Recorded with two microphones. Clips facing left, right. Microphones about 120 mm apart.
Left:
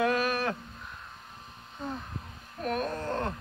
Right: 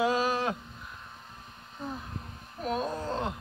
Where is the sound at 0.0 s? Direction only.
15° right (ahead or behind).